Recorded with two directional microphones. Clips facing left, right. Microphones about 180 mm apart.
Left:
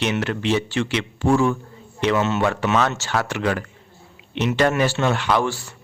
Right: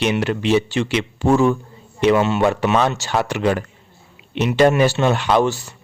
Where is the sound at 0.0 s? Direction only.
15° right (ahead or behind).